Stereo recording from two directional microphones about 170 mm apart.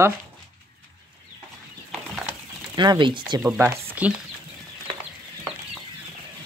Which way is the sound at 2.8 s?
25° right (ahead or behind).